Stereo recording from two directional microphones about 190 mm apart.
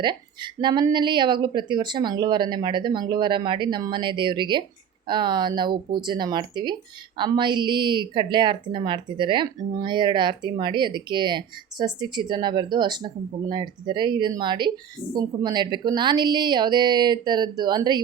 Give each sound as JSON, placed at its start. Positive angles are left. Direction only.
{"t": 0.0, "sound": "a woman's voice", "side_deg": -25}